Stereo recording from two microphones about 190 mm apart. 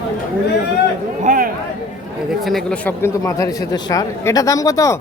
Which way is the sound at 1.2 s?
45° right (ahead or behind).